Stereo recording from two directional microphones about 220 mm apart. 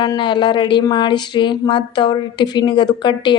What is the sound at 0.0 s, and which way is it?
A woman's voice, 20° left (ahead or behind).